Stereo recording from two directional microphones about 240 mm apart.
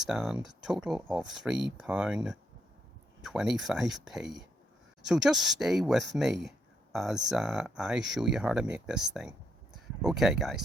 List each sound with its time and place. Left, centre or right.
0.1 s speech: centre